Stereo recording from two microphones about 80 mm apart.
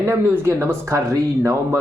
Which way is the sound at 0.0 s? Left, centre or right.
Right.